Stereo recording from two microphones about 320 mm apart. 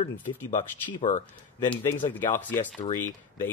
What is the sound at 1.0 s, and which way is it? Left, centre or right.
Speech, left.